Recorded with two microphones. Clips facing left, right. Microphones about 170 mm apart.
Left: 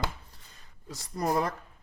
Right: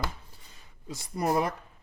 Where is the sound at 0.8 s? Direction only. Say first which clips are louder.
Right 3 dB; 20° right (ahead or behind).